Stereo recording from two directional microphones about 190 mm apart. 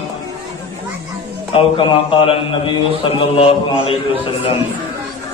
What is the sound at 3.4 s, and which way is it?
Mantra, 30° left (ahead or behind).